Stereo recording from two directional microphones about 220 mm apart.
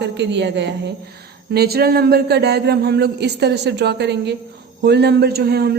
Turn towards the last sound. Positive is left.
turn(degrees=-45)  # may be behind; listen again after turning